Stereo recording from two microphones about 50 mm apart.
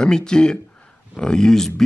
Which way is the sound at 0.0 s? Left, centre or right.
Centre.